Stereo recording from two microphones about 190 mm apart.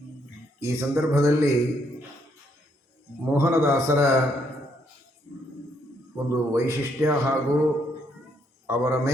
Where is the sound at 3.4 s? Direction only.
15° right (ahead or behind).